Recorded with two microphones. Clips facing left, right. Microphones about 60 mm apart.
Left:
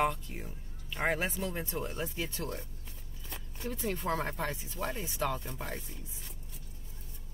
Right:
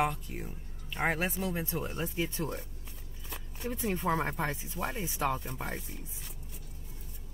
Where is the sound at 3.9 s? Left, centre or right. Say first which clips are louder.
Right 3 dB; centre.